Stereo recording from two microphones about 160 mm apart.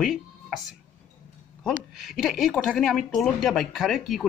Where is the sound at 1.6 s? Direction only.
Centre (ahead or behind).